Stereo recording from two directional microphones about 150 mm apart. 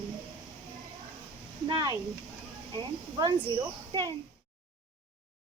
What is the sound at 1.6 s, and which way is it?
Speech, 30° right (ahead or behind).